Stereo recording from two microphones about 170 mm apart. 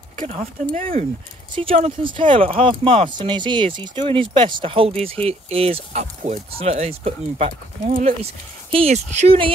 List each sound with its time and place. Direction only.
0.2 s speech: 40° right (ahead or behind)